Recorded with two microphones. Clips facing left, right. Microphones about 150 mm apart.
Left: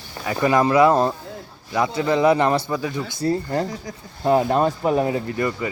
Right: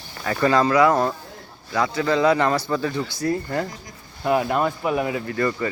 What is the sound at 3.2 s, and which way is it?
Speech, 30° left (ahead or behind).